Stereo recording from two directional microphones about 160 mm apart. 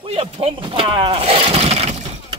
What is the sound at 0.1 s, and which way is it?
Vehicle, 35° right (ahead or behind).